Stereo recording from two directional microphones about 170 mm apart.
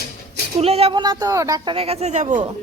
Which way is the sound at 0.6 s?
35° right (ahead or behind).